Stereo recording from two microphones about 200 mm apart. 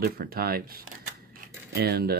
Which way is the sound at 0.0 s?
50° right (ahead or behind).